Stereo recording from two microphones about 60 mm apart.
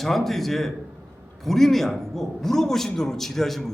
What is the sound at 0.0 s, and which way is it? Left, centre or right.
A man's voice, centre.